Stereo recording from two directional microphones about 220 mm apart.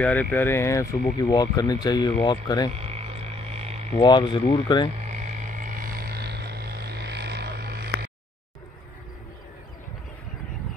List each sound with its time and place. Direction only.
0.0 s speech: 5° left (ahead or behind)
2.7 s frog: 30° right (ahead or behind)
3.9 s hum: 20° left (ahead or behind)
5.0 s a sound: 35° right (ahead or behind)